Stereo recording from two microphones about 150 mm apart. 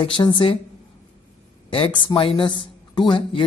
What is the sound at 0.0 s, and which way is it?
Speech, 35° left (ahead or behind).